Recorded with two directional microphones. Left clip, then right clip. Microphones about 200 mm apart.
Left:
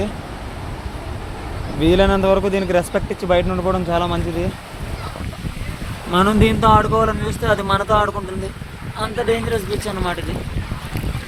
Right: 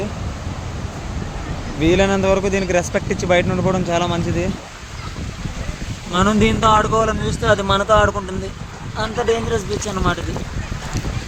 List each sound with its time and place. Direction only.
1.8 s speech: 5° right (ahead or behind)
6.1 s speech: centre (ahead or behind)